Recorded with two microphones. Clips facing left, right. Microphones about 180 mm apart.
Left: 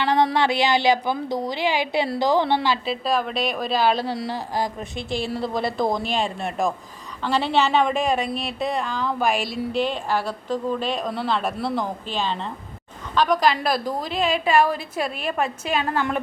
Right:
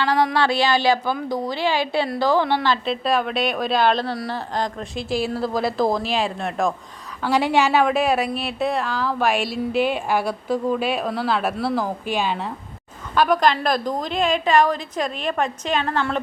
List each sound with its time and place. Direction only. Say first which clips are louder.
0.0 s a woman's voice: even; 25° left (ahead or behind)
2.8 s a woman's voice: right 2 dB; centre (ahead or behind)
7.2 s a woman's voice: right 2 dB; 10° right (ahead or behind); by 16.2 s 10° left (ahead or behind)